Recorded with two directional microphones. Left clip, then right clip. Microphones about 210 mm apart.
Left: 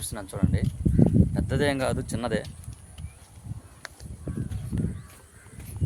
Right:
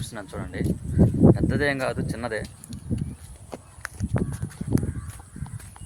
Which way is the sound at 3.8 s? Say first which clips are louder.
Right 6 dB; 15° right (ahead or behind).